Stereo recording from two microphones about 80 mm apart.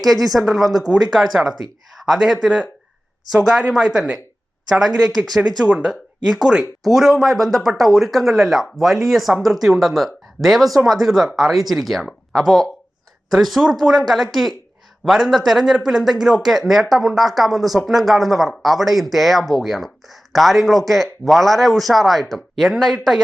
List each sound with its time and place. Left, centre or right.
0.0 s speech: centre
3.7 s speech: centre